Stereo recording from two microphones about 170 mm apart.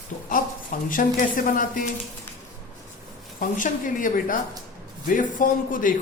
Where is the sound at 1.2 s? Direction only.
55° left (ahead or behind).